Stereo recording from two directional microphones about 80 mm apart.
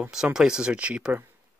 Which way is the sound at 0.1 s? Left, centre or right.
Centre.